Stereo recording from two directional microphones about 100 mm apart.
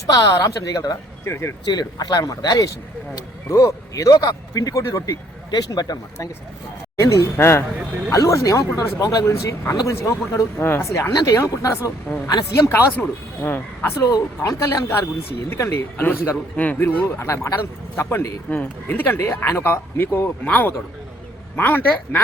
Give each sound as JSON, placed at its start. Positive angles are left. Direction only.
{"t": 0.1, "sound": "speech", "side_deg": 40}
{"t": 1.2, "sound": "speech", "side_deg": 25}
{"t": 1.6, "sound": "speech", "side_deg": 45}
{"t": 12.0, "sound": "speech", "side_deg": 15}
{"t": 12.5, "sound": "speech", "side_deg": 30}